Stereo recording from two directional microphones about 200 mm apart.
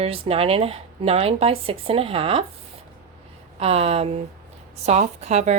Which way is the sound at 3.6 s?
30° right (ahead or behind).